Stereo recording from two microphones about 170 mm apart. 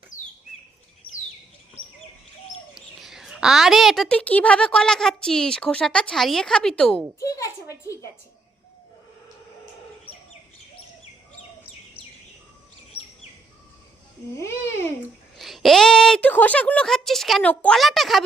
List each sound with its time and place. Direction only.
2.7 s a child's voice: centre (ahead or behind)
7.2 s a woman's voice: 20° left (ahead or behind)
14.3 s a child's voice: 15° left (ahead or behind)
15.4 s a woman's voice: centre (ahead or behind)